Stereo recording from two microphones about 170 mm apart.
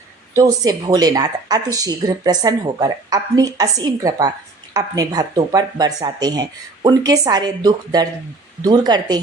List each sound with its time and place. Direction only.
0.3 s speech: 20° right (ahead or behind)